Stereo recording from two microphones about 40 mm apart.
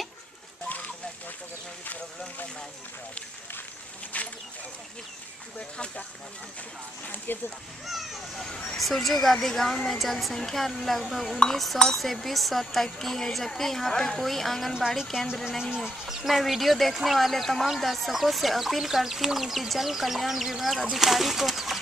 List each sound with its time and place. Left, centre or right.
0.7 s a sound: left
7.3 s a child's voice: left
7.8 s speech: centre
8.4 s speech: centre
8.7 s speech: centre
14.7 s speech: centre